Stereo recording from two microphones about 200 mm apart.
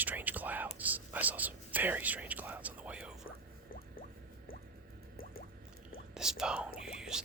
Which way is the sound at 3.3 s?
45° left (ahead or behind).